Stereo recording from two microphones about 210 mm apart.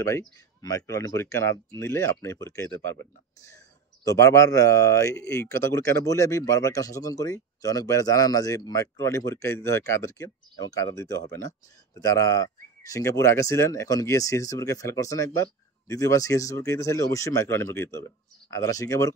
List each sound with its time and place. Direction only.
0.6 s speech: 15° left (ahead or behind)
4.0 s speech: 15° left (ahead or behind)